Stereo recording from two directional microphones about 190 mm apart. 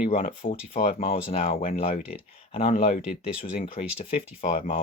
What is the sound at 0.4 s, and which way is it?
Speech, 40° left (ahead or behind).